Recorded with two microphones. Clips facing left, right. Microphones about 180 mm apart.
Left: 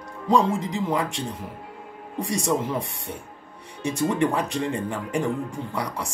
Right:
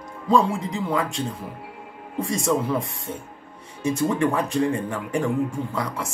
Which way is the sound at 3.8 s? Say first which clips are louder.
Right 1 dB; 15° left (ahead or behind).